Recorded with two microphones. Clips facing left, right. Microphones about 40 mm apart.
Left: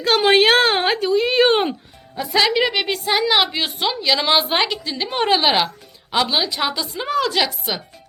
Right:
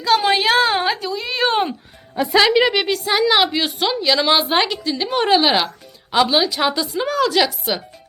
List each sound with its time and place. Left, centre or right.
0.2 s speech: left
2.3 s a woman's voice: centre
7.1 s a woman's voice: centre
7.3 s a woman's voice: centre